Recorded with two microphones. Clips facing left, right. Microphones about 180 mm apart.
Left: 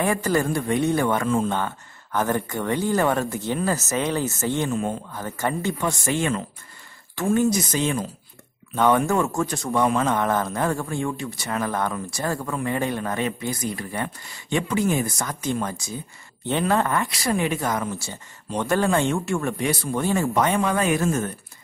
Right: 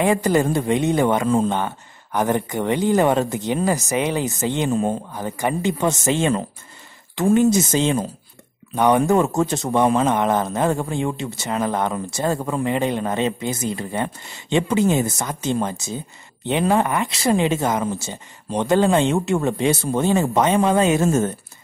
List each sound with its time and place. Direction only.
0.0 s speech: 20° right (ahead or behind)
4.6 s speech: 30° right (ahead or behind)
5.1 s speech: 15° right (ahead or behind)